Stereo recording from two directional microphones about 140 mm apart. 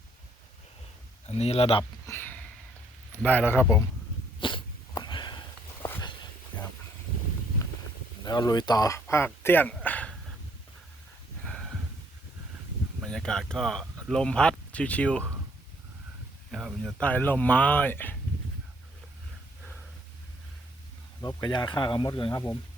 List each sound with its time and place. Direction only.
1.3 s speech: 50° left (ahead or behind)
2.0 s a sound: 15° left (ahead or behind)
3.1 s speech: 10° left (ahead or behind)
4.4 s sneeze: 35° left (ahead or behind)
8.2 s speech: 30° left (ahead or behind); by 10.2 s 10° left (ahead or behind)
11.4 s a sound: 5° left (ahead or behind)
13.1 s speech: 5° left (ahead or behind)
16.5 s speech: centre (ahead or behind)
17.0 s speech: 10° left (ahead or behind)
21.2 s speech: 30° left (ahead or behind)